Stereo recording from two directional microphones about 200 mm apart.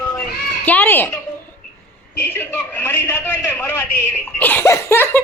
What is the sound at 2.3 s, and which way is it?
Speech, 10° left (ahead or behind).